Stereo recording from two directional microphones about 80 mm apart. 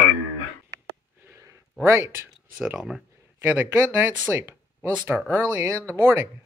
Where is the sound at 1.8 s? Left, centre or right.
Right.